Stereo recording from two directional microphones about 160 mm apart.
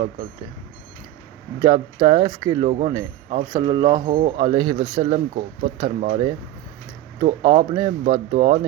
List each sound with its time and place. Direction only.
1.6 s speech: 35° right (ahead or behind)
3.5 s speech: 25° right (ahead or behind); by 6.3 s 50° right (ahead or behind)
7.2 s speech: 35° right (ahead or behind)